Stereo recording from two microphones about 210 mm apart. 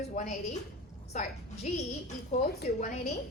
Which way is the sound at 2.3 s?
35° left (ahead or behind).